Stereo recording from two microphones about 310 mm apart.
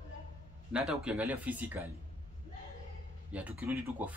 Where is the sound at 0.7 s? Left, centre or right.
Centre.